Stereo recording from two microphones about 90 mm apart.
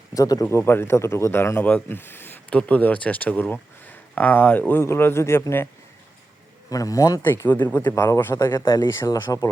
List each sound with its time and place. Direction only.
0.1 s a man's voice: 40° left (ahead or behind)
0.4 s speech: 30° left (ahead or behind)
6.7 s a man's voice: 40° left (ahead or behind)
7.2 s a man's voice: 20° left (ahead or behind); by 8.6 s 40° left (ahead or behind)
8.6 s speech: 50° left (ahead or behind)
9.0 s a man's voice: 40° left (ahead or behind)